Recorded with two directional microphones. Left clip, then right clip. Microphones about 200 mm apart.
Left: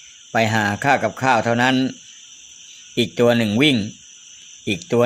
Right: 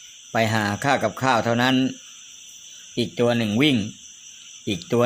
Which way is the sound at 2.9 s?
20° left (ahead or behind).